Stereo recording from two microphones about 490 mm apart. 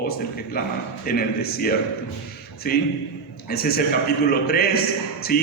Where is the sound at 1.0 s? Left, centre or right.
Centre.